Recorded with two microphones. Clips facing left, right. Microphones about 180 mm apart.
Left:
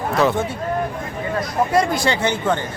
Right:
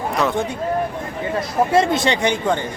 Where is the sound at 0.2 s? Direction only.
Centre (ahead or behind).